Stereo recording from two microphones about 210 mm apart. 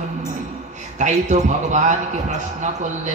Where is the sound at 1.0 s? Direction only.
35° right (ahead or behind).